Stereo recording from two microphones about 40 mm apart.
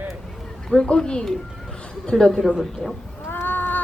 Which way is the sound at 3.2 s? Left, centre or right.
Left.